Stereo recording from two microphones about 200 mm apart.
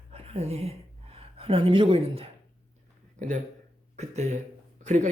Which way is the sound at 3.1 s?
40° right (ahead or behind).